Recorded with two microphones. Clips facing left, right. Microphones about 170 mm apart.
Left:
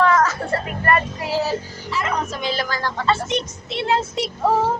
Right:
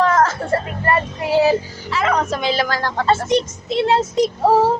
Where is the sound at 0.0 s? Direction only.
50° right (ahead or behind).